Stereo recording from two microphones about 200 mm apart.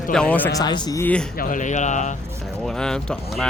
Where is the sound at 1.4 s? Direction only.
40° left (ahead or behind).